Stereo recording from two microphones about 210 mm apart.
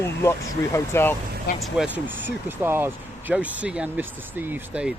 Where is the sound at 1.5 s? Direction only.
50° left (ahead or behind).